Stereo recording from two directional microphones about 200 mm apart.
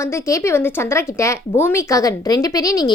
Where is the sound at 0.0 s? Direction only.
15° left (ahead or behind).